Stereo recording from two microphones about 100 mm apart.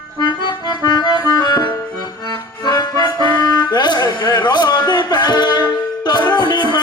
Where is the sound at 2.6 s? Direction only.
45° left (ahead or behind).